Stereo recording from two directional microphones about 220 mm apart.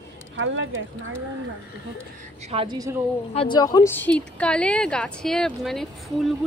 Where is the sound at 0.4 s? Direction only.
60° right (ahead or behind).